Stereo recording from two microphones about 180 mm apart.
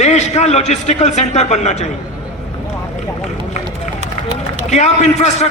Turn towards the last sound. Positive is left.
turn(degrees=40)  # may be behind; listen again after turning